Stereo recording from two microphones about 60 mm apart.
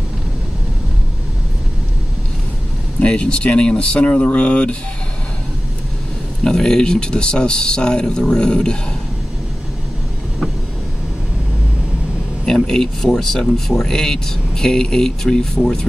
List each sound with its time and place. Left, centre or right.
3.0 s speech: centre
6.4 s speech: centre
12.4 s speech: centre